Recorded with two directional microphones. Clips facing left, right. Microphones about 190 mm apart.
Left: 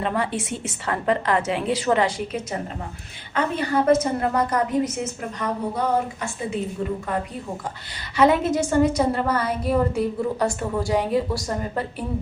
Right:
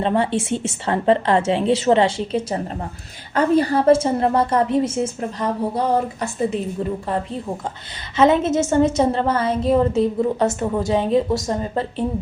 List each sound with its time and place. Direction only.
0.0 s a woman's voice: 25° right (ahead or behind)
8.1 s a woman's voice: 20° right (ahead or behind)